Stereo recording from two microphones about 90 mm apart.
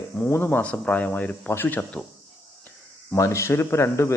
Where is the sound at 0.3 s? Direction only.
25° left (ahead or behind).